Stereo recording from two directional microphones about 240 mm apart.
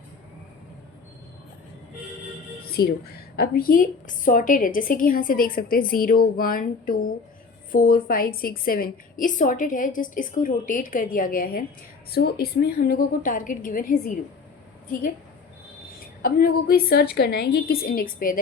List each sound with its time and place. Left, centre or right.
2.7 s a woman's voice: left
16.2 s a woman's voice: left